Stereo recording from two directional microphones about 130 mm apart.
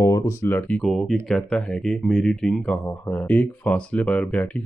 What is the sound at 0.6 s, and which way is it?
Speech, 5° left (ahead or behind).